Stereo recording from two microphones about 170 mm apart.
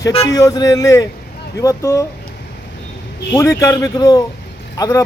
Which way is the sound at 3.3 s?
15° left (ahead or behind).